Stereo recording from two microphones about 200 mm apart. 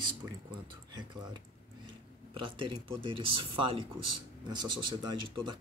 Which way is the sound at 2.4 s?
25° right (ahead or behind).